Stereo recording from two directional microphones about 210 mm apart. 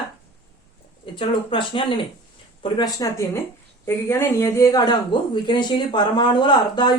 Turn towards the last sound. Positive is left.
turn(degrees=20)  # may be behind; listen again after turning